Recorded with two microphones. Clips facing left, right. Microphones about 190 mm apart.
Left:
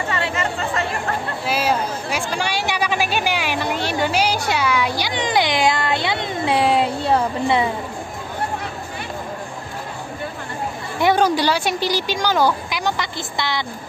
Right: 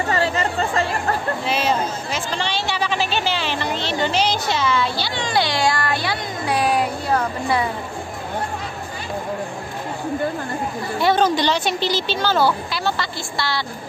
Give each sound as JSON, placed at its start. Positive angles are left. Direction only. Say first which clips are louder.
{"t": 0.1, "sound": "chatter", "louder": "right 4 dB", "side_deg": -35}
{"t": 1.4, "sound": "speech", "louder": "left 3 dB", "side_deg": 10}
{"t": 11.0, "sound": "speech", "louder": "left 1 dB", "side_deg": 15}